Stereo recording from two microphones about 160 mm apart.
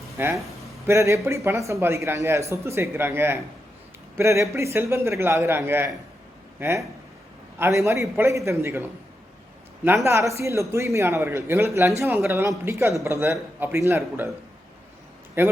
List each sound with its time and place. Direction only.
0.3 s speech: centre (ahead or behind)
0.9 s a man's voice: 20° right (ahead or behind)
7.6 s a man's voice: 20° right (ahead or behind)
15.4 s a man's voice: 15° right (ahead or behind)